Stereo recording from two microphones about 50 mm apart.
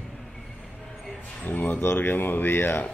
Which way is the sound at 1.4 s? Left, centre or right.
Left.